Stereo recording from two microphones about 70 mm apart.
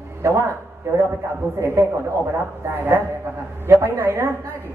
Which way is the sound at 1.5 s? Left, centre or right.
Right.